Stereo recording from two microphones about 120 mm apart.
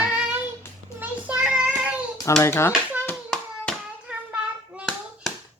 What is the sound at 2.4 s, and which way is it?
Mantra, 20° left (ahead or behind).